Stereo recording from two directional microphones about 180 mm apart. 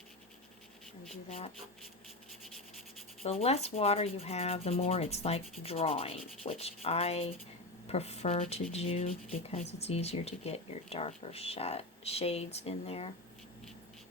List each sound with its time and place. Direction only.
1.1 s speech: 35° left (ahead or behind)
3.4 s speech: 35° left (ahead or behind)